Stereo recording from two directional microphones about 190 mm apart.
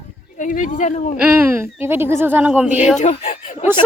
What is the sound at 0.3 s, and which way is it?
Speech, 45° left (ahead or behind).